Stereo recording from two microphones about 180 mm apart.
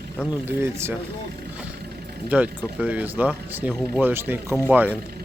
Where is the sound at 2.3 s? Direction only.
5° right (ahead or behind).